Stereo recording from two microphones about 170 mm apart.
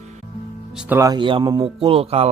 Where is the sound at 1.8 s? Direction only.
35° right (ahead or behind).